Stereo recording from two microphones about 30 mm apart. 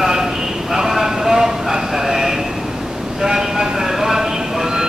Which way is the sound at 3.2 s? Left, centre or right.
Centre.